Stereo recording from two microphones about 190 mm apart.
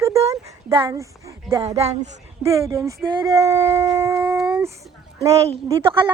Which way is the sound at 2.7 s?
15° right (ahead or behind).